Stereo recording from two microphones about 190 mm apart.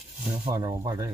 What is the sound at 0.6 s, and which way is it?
Speech, 20° right (ahead or behind).